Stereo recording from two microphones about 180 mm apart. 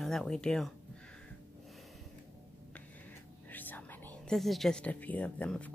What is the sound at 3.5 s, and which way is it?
Whispering, 10° left (ahead or behind).